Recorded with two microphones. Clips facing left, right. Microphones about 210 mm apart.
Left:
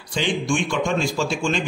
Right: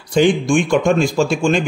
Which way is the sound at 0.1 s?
50° right (ahead or behind).